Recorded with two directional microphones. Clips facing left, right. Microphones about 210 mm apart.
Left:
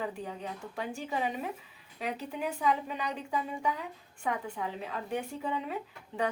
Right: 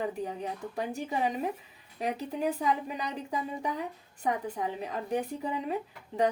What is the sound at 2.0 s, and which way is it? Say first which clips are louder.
A woman's voice: right 4 dB; 40° right (ahead or behind).